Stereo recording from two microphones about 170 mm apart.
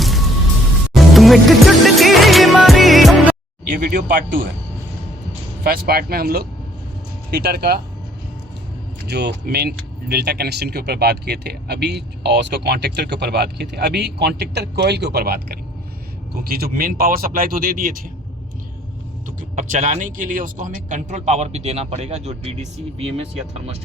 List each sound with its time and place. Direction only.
0.0 s music: centre (ahead or behind)
3.8 s speech: 65° right (ahead or behind)
5.6 s speech: 65° right (ahead or behind)
9.0 s speech: 80° right; by 18.0 s 55° right (ahead or behind)
19.4 s speech: 45° right (ahead or behind)